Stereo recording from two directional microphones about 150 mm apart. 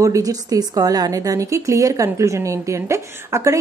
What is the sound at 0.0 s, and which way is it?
A woman's voice, 20° right (ahead or behind).